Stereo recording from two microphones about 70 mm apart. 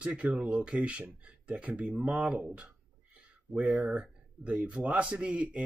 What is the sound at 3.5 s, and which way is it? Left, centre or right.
Speech, centre.